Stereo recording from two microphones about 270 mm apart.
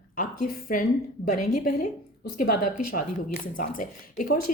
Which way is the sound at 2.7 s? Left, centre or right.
Left.